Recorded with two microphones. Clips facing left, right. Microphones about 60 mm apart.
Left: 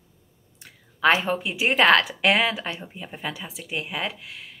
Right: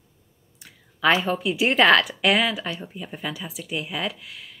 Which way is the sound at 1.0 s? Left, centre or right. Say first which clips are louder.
Even; left.